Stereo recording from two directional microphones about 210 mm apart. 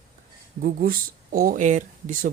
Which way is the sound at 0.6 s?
40° right (ahead or behind).